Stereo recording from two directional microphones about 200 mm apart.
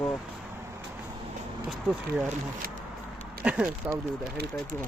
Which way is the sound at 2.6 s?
45° right (ahead or behind).